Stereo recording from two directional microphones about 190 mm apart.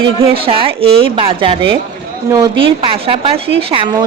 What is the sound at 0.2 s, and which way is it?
A woman's voice, 30° right (ahead or behind).